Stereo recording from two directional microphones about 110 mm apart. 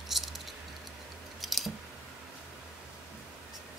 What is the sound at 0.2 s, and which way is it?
Rattle, centre (ahead or behind).